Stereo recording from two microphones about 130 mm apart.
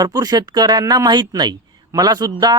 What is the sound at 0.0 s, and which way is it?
Speech, 30° right (ahead or behind).